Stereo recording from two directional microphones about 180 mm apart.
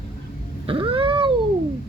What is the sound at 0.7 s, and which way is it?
Cat, 30° right (ahead or behind).